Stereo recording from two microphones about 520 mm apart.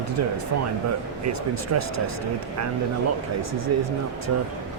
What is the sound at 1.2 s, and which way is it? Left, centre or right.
Speech, right.